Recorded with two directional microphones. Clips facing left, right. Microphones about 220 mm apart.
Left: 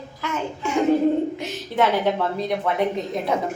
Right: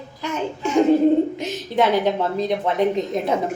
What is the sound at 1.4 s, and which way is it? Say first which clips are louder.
A woman's voice: right 2 dB; 15° right (ahead or behind).